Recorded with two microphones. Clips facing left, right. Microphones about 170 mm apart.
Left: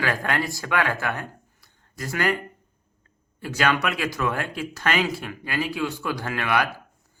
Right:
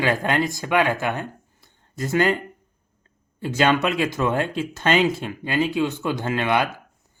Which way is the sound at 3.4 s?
25° right (ahead or behind).